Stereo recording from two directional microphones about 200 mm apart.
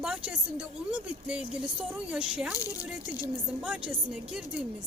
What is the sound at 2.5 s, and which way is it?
Speech, 15° left (ahead or behind).